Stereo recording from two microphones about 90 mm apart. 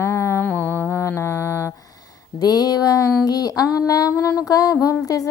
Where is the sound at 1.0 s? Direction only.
30° left (ahead or behind).